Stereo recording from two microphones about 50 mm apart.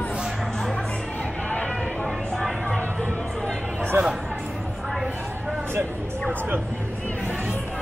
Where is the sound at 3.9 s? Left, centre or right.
Right.